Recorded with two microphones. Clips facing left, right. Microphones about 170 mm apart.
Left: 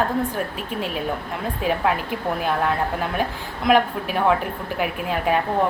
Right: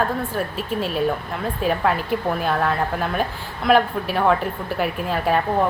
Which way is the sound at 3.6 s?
15° left (ahead or behind).